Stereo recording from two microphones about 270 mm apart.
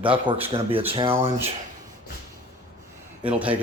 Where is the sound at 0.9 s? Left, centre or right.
Right.